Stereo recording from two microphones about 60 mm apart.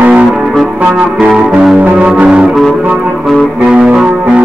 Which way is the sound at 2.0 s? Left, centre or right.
Centre.